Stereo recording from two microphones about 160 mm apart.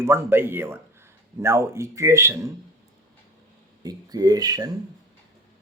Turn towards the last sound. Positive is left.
turn(degrees=-25)  # may be behind; listen again after turning